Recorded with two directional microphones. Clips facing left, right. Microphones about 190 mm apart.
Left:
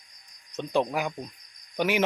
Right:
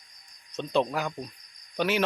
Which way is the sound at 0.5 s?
15° left (ahead or behind).